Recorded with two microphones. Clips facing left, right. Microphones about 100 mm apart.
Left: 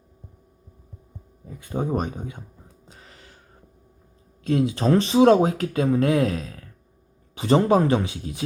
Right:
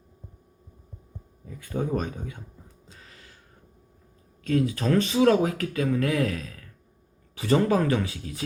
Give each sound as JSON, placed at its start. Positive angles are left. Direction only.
{"t": 1.5, "sound": "speech", "side_deg": 20}
{"t": 2.8, "sound": "gasp", "side_deg": 30}
{"t": 4.4, "sound": "speech", "side_deg": 30}